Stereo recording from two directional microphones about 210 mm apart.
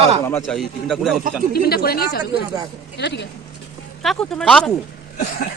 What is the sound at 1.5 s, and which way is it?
Speech, 45° left (ahead or behind).